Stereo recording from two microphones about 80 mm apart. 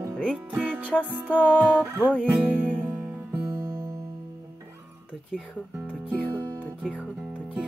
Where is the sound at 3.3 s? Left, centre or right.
Right.